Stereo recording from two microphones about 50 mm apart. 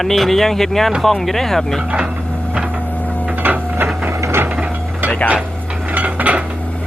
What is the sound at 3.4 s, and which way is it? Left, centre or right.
Printer, right.